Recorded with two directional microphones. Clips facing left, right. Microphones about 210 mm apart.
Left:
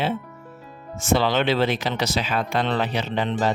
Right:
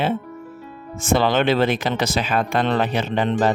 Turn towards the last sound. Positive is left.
turn(degrees=-50)  # may be behind; listen again after turning